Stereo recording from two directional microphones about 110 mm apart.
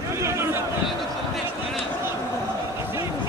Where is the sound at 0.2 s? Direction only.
25° right (ahead or behind).